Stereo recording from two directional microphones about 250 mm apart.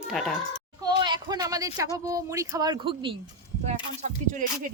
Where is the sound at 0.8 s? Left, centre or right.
Centre.